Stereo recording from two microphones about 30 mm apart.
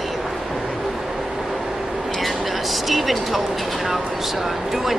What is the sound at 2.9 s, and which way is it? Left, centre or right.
Speech, centre.